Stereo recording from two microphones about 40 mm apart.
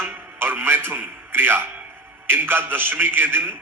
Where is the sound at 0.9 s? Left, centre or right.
Right.